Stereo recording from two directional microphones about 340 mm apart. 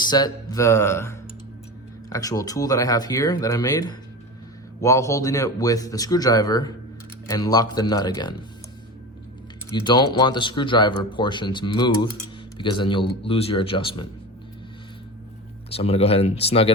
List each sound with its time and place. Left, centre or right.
0.0 s a man's voice: centre
9.7 s a man's voice: centre
15.7 s a man's voice: centre